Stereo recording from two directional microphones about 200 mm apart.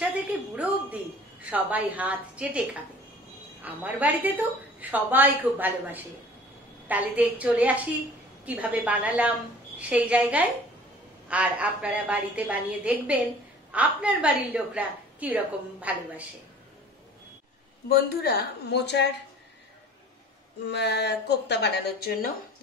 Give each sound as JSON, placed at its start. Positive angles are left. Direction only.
{"t": 0.6, "sound": "a woman's voice", "side_deg": -5}
{"t": 3.6, "sound": "a woman's voice", "side_deg": -10}
{"t": 17.8, "sound": "a woman's voice", "side_deg": 50}
{"t": 20.6, "sound": "speech", "side_deg": 55}